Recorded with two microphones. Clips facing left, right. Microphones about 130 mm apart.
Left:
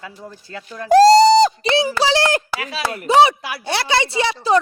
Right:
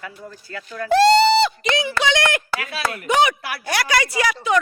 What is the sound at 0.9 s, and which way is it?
Speech, 40° left (ahead or behind).